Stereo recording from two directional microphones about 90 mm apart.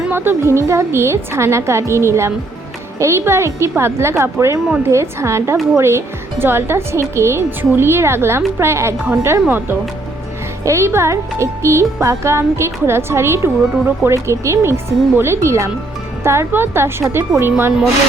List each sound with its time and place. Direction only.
0.1 s a woman's voice: 25° right (ahead or behind)